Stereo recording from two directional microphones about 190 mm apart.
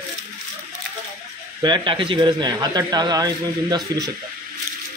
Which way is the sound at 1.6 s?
25° right (ahead or behind).